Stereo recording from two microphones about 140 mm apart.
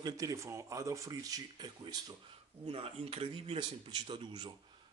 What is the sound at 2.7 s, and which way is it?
A man's voice, 45° right (ahead or behind).